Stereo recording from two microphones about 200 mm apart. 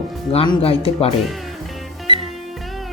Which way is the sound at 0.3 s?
25° left (ahead or behind).